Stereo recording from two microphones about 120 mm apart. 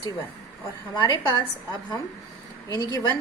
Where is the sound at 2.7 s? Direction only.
30° left (ahead or behind).